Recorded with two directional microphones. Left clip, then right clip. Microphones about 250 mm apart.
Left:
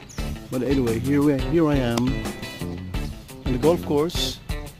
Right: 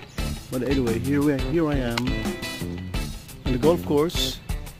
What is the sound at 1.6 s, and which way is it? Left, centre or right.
Speech, left.